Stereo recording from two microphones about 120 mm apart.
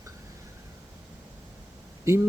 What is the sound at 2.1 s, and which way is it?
Speech, 25° right (ahead or behind).